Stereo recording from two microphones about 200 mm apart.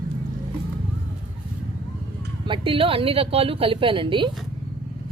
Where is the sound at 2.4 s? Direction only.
25° right (ahead or behind).